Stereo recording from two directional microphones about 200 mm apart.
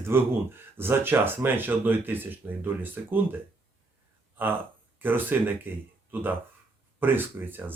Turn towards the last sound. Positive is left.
turn(degrees=-10)  # may be behind; listen again after turning